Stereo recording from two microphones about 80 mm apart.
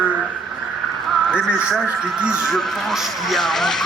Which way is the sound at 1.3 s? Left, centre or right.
Centre.